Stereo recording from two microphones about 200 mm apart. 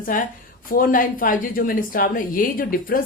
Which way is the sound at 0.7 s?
45° left (ahead or behind).